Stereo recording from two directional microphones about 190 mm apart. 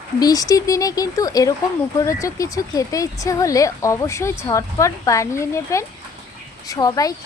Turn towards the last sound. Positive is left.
turn(degrees=20)  # may be behind; listen again after turning